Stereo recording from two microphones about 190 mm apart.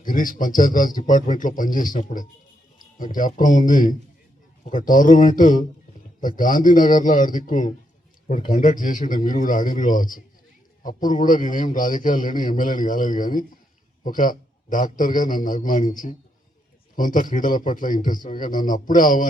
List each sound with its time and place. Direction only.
0.0 s a man's voice: 45° left (ahead or behind)